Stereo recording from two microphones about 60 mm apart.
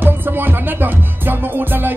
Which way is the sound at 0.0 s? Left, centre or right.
Right.